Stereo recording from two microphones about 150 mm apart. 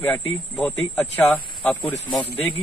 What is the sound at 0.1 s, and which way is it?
Speech, 10° left (ahead or behind).